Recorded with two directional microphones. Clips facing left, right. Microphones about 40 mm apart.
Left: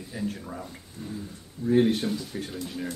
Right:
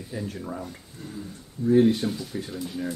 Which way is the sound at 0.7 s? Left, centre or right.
Centre.